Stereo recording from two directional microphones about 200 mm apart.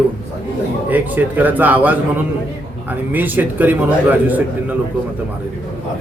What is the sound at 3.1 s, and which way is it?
Speech, 10° right (ahead or behind).